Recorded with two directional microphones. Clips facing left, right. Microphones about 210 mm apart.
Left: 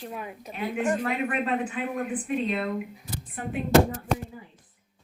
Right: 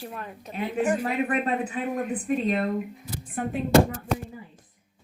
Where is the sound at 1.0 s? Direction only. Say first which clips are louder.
Right 2 dB; 35° right (ahead or behind).